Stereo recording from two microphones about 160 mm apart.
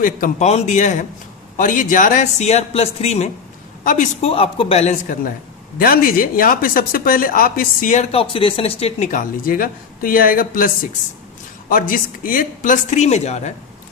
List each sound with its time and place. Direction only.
0.0 s speech: 60° left (ahead or behind)
0.4 s a man's voice: 45° left (ahead or behind)
3.8 s a woman's voice: 50° left (ahead or behind)
5.8 s speech: 65° left (ahead or behind)
8.1 s a woman's voice: 35° left (ahead or behind)
9.1 s speech: 60° left (ahead or behind)
11.7 s speech: 60° left (ahead or behind); by 13.5 s 45° left (ahead or behind)